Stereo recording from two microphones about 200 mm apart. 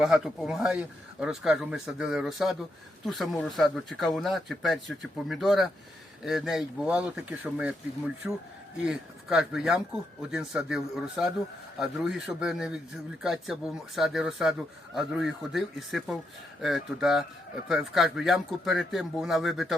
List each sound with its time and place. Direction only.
0.0 s speech: centre (ahead or behind)